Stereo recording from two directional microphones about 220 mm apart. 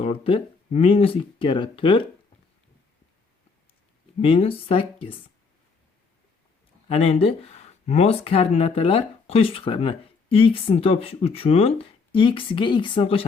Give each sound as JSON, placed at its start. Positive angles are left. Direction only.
{"t": 0.0, "sound": "speech", "side_deg": 25}
{"t": 4.2, "sound": "speech", "side_deg": 25}
{"t": 6.8, "sound": "speech", "side_deg": 25}